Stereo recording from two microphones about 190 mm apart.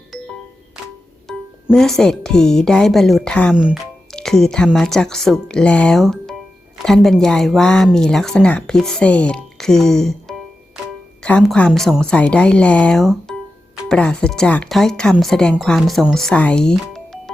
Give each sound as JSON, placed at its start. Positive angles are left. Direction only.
{"t": 1.3, "sound": "speech", "side_deg": 0}
{"t": 16.8, "sound": "music", "side_deg": 0}